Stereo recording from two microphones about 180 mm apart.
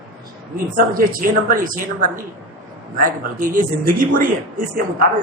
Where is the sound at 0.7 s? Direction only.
50° right (ahead or behind).